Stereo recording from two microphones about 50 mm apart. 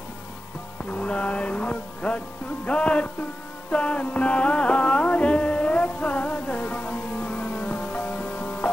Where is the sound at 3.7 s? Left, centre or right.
Left.